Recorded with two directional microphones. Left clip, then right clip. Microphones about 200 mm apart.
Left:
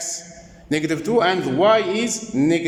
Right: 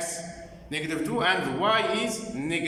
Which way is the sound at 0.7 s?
40° left (ahead or behind).